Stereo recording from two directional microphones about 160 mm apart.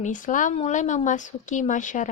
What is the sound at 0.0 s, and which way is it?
Speech, 55° left (ahead or behind).